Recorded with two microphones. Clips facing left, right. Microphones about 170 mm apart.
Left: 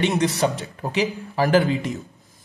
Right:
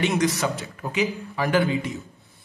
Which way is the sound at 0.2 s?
30° left (ahead or behind).